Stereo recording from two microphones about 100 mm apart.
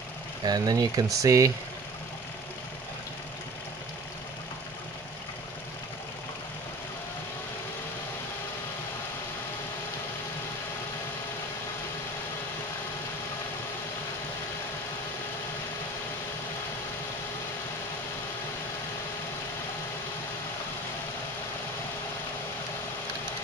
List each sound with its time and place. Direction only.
0.5 s speech: 40° right (ahead or behind)